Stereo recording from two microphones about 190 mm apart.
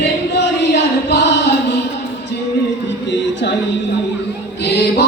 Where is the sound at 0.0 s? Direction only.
65° left (ahead or behind).